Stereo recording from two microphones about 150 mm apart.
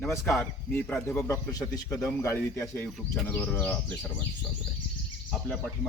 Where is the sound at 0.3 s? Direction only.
15° left (ahead or behind).